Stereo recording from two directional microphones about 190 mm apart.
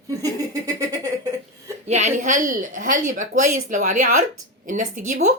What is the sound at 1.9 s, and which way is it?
Speech, 40° right (ahead or behind).